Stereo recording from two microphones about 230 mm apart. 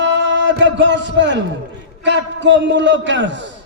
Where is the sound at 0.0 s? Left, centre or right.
Right.